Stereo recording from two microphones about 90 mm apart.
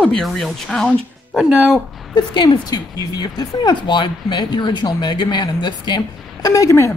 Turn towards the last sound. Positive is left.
turn(degrees=35)  # may be behind; listen again after turning